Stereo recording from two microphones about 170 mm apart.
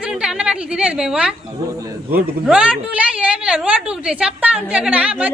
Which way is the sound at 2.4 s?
5° right (ahead or behind).